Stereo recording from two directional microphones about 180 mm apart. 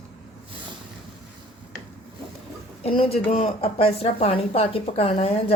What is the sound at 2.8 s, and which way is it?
A woman's voice, 35° left (ahead or behind).